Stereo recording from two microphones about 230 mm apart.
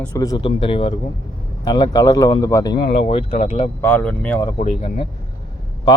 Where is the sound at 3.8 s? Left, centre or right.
Centre.